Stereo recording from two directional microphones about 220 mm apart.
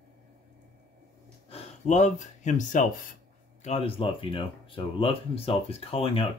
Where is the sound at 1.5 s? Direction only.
30° left (ahead or behind).